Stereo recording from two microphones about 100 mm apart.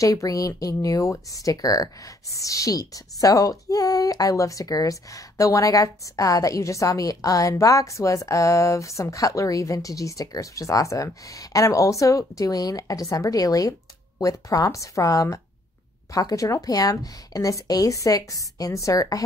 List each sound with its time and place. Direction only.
0.0 s a woman's voice: 35° left (ahead or behind)